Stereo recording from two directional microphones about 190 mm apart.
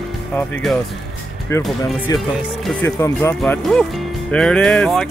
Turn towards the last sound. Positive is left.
turn(degrees=5)  # may be behind; listen again after turning